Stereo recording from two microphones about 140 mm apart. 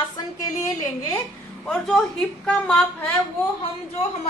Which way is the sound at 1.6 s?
5° left (ahead or behind).